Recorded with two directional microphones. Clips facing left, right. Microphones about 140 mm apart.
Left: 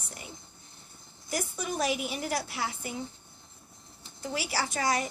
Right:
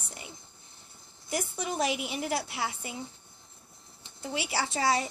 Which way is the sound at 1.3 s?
25° right (ahead or behind).